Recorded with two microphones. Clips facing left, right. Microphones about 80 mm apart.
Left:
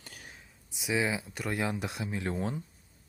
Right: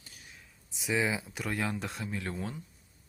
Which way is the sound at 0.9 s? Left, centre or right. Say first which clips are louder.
Even; centre.